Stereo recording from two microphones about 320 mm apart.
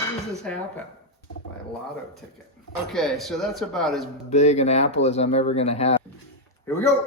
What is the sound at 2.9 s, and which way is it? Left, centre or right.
Speech, centre.